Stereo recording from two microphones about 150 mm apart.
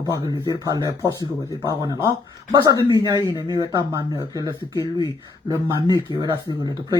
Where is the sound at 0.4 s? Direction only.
25° right (ahead or behind).